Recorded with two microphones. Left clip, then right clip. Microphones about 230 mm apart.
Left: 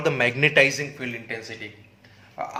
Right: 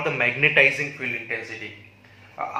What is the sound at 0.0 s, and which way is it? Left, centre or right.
Speech, left.